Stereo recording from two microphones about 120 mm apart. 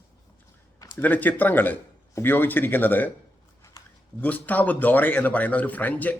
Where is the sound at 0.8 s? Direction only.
30° left (ahead or behind).